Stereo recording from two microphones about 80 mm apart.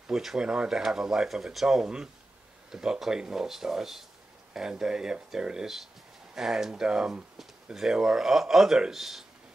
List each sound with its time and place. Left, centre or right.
0.0 s speech: centre